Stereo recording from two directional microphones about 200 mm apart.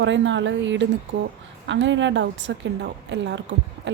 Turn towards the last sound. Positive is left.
turn(degrees=-60)  # may be behind; listen again after turning